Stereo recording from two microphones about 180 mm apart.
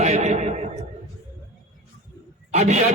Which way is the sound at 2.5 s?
40° right (ahead or behind).